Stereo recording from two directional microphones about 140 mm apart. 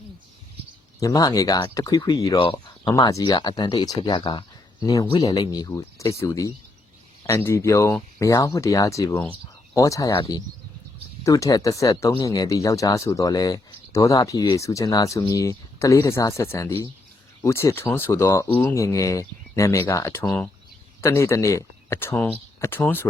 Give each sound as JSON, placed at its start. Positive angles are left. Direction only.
{"t": 0.9, "sound": "speech", "side_deg": 25}
{"t": 2.4, "sound": "speech", "side_deg": 40}
{"t": 2.9, "sound": "speech", "side_deg": 25}
{"t": 11.2, "sound": "speech", "side_deg": 25}